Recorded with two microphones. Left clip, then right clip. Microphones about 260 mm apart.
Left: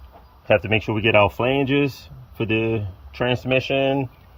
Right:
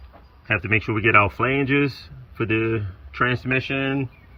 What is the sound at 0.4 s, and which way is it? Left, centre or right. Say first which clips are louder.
Speech: left 3 dB; centre.